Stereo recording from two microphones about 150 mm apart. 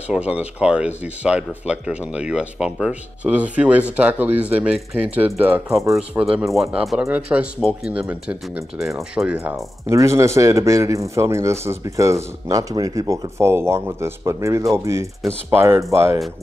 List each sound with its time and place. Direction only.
0.4 s speech: 10° right (ahead or behind)
9.8 s speech: 20° right (ahead or behind)